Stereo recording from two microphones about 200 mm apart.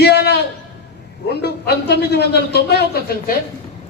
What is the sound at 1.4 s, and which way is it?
Speech, 55° left (ahead or behind).